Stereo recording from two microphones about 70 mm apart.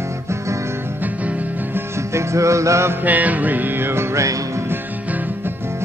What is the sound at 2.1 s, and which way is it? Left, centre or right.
Music, right.